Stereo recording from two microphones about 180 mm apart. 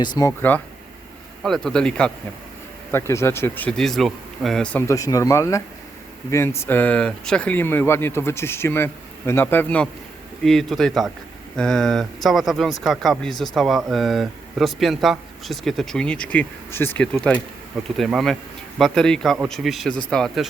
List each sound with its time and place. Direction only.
0.0 s speech: 20° left (ahead or behind)
1.5 s speech: centre (ahead or behind)